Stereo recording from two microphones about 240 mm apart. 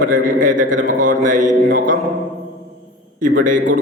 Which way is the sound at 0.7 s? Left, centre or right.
Right.